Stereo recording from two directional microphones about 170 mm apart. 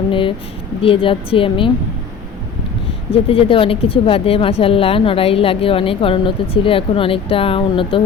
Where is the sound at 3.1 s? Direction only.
35° left (ahead or behind).